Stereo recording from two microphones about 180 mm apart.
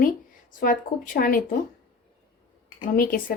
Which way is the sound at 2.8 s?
55° left (ahead or behind).